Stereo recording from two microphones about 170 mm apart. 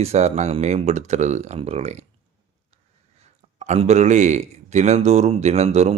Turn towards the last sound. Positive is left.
turn(degrees=-40)  # may be behind; listen again after turning